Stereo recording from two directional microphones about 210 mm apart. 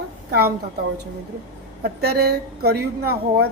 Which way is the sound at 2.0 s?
50° right (ahead or behind).